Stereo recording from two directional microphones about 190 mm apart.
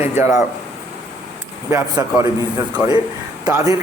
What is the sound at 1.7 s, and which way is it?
Speech, 15° right (ahead or behind).